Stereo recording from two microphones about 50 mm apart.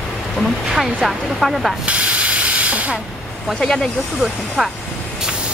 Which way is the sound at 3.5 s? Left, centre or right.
Centre.